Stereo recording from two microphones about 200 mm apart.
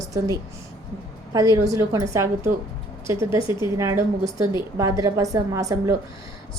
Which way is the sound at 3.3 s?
15° right (ahead or behind).